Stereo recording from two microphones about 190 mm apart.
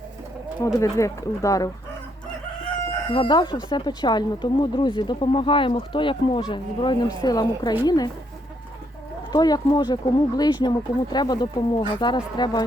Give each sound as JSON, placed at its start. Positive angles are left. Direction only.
{"t": 0.8, "sound": "speech", "side_deg": 15}
{"t": 3.1, "sound": "speech", "side_deg": 25}
{"t": 9.3, "sound": "speech", "side_deg": 20}